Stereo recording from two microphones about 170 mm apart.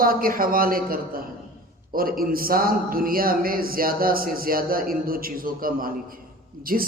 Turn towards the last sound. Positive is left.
turn(degrees=-60)  # may be behind; listen again after turning